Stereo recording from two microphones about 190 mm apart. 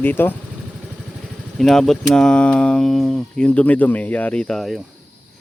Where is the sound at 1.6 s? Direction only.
Centre (ahead or behind).